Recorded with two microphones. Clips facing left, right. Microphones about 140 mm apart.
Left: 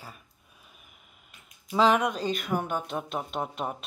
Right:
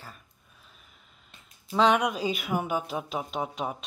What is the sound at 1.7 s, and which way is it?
Speech, centre (ahead or behind).